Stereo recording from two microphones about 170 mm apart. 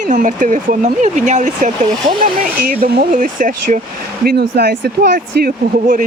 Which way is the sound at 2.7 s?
55° right (ahead or behind).